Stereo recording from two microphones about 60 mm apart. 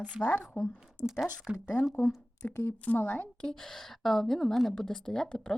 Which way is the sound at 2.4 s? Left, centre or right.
Left.